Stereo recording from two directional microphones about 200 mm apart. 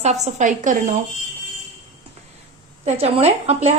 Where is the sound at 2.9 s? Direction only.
30° right (ahead or behind).